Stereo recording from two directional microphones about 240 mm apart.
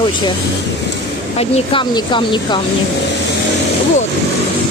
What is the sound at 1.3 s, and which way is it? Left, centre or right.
Speech, left.